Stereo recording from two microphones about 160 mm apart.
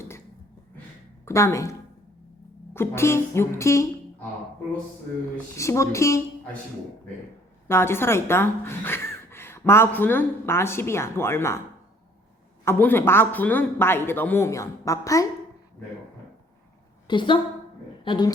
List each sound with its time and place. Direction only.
1.2 s speech: 15° left (ahead or behind)
2.7 s speech: 15° left (ahead or behind)
5.5 s speech: 20° left (ahead or behind)
7.7 s speech: 15° left (ahead or behind)
12.6 s speech: 15° left (ahead or behind)
17.1 s a woman's voice: 30° left (ahead or behind)